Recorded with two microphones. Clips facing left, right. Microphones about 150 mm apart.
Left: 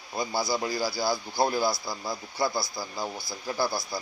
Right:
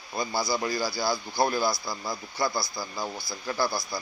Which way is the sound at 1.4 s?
15° left (ahead or behind).